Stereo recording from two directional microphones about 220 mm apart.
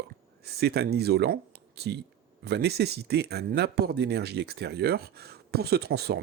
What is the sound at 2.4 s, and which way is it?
Speech, 50° right (ahead or behind).